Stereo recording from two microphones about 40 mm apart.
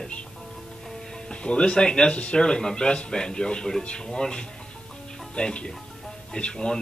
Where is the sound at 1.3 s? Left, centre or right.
Left.